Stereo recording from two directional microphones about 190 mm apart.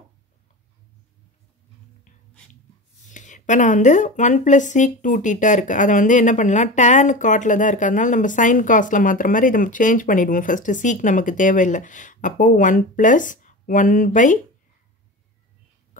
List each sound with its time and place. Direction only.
3.1 s speech: 40° left (ahead or behind)